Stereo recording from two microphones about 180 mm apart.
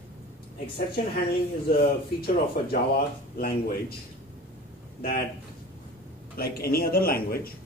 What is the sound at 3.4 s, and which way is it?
Speech, 55° left (ahead or behind).